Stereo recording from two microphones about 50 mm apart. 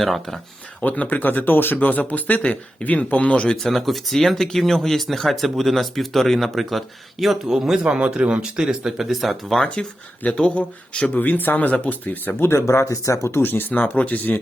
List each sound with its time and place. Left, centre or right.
0.0 s speech: centre
0.8 s speech: left
3.6 s speech: centre
7.9 s speech: right; by 9.6 s centre
9.8 s speech: centre; by 12.5 s left
12.5 s speech: left
13.3 s speech: left